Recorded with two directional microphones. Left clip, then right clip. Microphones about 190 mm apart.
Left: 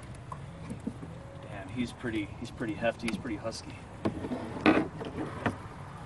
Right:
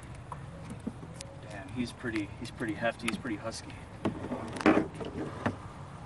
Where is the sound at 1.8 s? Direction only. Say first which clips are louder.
Even; centre (ahead or behind).